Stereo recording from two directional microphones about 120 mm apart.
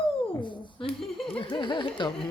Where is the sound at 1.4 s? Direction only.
40° left (ahead or behind).